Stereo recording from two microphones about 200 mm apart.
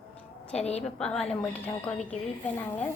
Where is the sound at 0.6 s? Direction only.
30° left (ahead or behind).